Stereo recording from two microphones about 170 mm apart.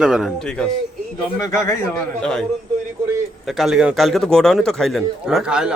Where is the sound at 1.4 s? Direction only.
20° left (ahead or behind).